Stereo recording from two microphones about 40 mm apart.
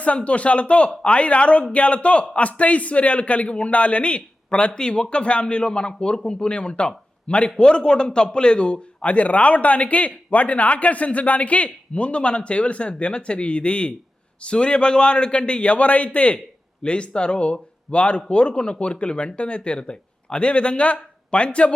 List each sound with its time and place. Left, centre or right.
0.3 s a man's voice: left